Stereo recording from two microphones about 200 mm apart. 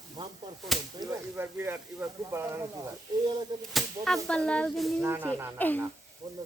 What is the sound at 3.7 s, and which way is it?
Female singing, centre (ahead or behind).